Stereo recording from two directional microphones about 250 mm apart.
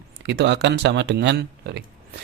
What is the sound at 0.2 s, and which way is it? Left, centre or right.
Speech, right.